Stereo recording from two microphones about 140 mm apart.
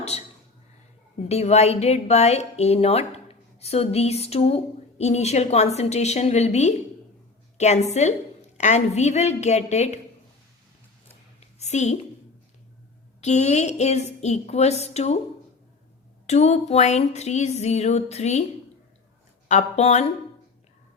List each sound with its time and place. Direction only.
0.1 s a woman's voice: 50° left (ahead or behind)
11.3 s a sound: 55° left (ahead or behind)
13.2 s a woman's voice: 55° left (ahead or behind)
16.2 s a woman's voice: 50° left (ahead or behind)
19.5 s speech: 55° left (ahead or behind)